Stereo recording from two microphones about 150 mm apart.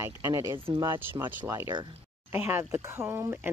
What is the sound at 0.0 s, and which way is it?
Speech, 20° right (ahead or behind).